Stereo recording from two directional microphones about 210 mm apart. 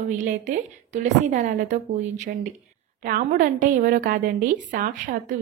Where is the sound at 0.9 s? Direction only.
35° right (ahead or behind).